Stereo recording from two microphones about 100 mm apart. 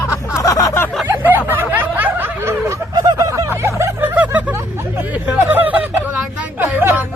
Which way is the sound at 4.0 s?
15° right (ahead or behind).